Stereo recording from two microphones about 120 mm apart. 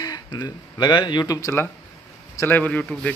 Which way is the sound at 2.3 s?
15° left (ahead or behind).